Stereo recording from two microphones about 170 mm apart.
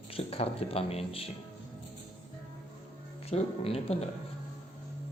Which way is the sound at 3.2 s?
35° left (ahead or behind).